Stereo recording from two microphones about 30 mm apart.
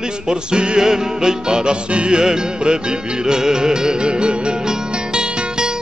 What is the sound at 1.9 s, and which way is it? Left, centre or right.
Music, right.